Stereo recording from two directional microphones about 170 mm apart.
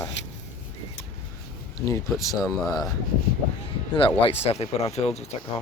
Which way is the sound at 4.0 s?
30° left (ahead or behind).